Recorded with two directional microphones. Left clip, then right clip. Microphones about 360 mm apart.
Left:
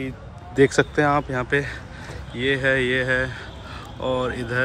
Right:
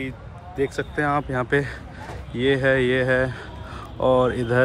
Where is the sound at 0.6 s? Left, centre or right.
Centre.